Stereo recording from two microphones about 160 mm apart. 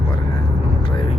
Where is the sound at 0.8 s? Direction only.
35° left (ahead or behind).